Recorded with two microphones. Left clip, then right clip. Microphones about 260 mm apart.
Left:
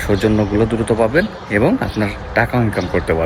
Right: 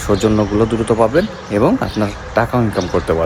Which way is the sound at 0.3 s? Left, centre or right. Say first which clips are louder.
Right 1 dB; centre.